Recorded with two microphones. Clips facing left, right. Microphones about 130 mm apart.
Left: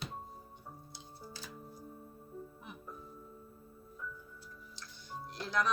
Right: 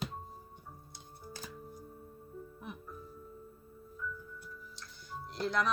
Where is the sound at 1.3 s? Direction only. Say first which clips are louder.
Right 5 dB; 45° right (ahead or behind).